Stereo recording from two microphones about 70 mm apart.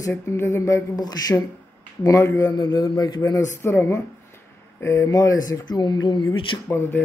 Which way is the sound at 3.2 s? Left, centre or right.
Left.